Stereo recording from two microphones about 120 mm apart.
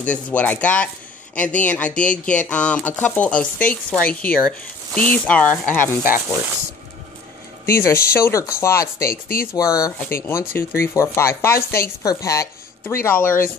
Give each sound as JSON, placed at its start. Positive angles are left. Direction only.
{"t": 0.0, "sound": "speech", "side_deg": 10}
{"t": 7.6, "sound": "speech", "side_deg": 20}
{"t": 9.9, "sound": "speech", "side_deg": 15}